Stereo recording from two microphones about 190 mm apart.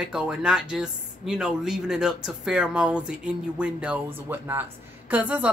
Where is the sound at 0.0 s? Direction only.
5° right (ahead or behind).